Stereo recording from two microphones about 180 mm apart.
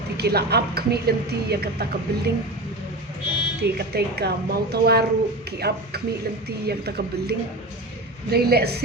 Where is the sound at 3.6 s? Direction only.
65° right (ahead or behind).